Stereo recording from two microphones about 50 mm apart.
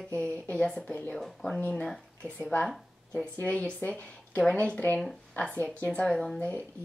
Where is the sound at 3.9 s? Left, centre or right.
Left.